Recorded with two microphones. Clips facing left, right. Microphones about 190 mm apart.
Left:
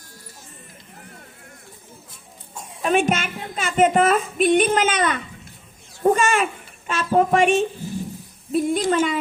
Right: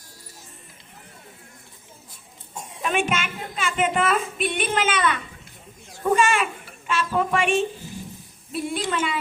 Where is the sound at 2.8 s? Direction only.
40° left (ahead or behind).